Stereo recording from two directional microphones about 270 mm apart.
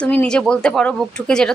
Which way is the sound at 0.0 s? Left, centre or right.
Centre.